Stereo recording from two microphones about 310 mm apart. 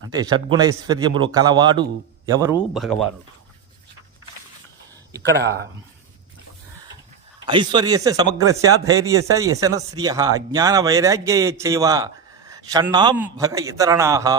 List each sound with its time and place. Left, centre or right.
0.1 s speech: centre
5.3 s speech: right
7.4 s speech: centre